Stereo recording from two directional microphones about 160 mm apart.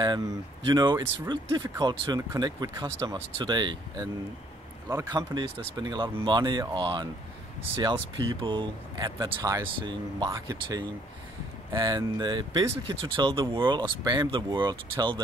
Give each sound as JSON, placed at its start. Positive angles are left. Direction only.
{"t": 0.0, "sound": "a man's voice", "side_deg": -25}